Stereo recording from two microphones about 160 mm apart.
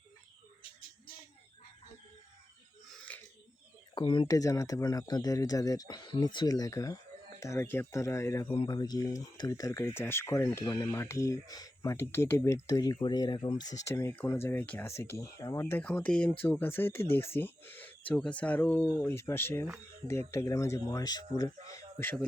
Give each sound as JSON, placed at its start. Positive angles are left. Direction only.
{"t": 3.1, "sound": "a sound", "side_deg": 10}
{"t": 3.9, "sound": "speech", "side_deg": 30}
{"t": 8.4, "sound": "speech", "side_deg": 30}
{"t": 21.9, "sound": "speech", "side_deg": 10}